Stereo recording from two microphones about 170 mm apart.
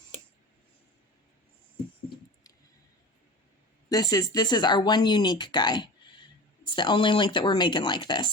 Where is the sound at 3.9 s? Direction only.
20° left (ahead or behind).